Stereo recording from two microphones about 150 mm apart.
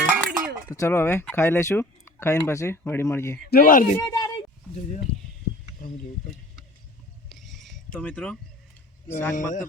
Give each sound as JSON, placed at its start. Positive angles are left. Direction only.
{"t": 0.0, "sound": "dishes", "side_deg": -5}
{"t": 0.7, "sound": "speech", "side_deg": 20}
{"t": 3.5, "sound": "speech", "side_deg": 70}
{"t": 3.9, "sound": "a sound", "side_deg": 20}
{"t": 5.1, "sound": "a sound", "side_deg": 10}
{"t": 5.8, "sound": "speech", "side_deg": 70}
{"t": 7.3, "sound": "a sound", "side_deg": 0}
{"t": 7.9, "sound": "speech", "side_deg": 10}
{"t": 9.3, "sound": "speech", "side_deg": 55}